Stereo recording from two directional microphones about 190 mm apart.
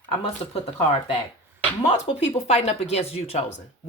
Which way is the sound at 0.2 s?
30° left (ahead or behind).